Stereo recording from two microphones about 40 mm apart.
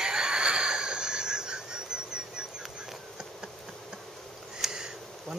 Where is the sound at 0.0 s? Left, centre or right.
Centre.